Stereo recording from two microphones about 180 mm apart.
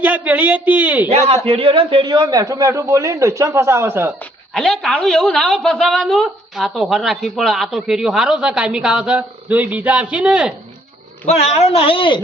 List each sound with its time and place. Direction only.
0.0 s a man's voice: 10° right (ahead or behind)
1.5 s a man's voice: 30° right (ahead or behind); by 4.1 s 10° right (ahead or behind)
4.5 s a woman's voice: centre (ahead or behind)
11.3 s a man's voice: 35° left (ahead or behind)